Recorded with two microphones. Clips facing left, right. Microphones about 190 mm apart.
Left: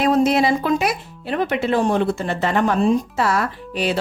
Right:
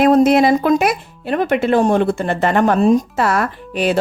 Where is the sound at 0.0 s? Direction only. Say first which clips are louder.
Right 5 dB; 50° right (ahead or behind).